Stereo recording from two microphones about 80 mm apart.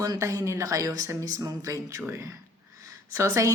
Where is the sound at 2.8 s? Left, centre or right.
Right.